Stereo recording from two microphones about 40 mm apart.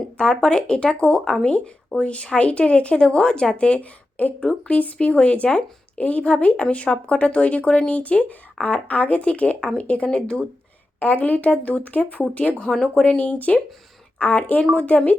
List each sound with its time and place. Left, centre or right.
0.2 s a woman's voice: left
4.4 s speech: left
11.0 s speech: left